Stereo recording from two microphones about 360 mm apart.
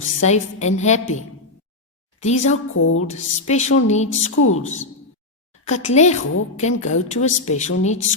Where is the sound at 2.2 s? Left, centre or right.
Centre.